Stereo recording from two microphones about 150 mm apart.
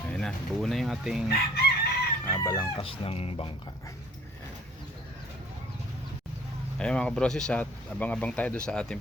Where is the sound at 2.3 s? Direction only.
25° left (ahead or behind).